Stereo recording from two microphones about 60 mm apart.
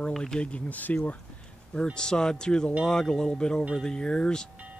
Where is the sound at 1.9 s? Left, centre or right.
Centre.